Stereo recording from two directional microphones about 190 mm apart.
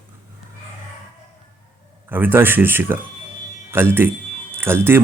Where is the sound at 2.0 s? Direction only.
10° right (ahead or behind).